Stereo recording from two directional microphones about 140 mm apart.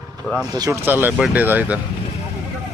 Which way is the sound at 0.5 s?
25° right (ahead or behind).